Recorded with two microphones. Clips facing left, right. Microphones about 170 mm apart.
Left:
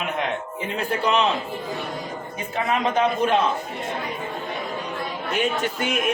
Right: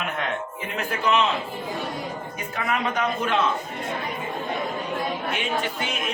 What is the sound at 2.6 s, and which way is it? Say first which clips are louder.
Speech: left 4 dB; 25° left (ahead or behind).